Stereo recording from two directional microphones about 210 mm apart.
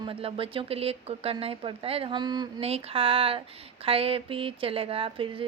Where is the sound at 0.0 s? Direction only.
25° right (ahead or behind).